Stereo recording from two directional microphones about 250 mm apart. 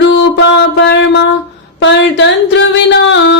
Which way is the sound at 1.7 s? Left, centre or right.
Left.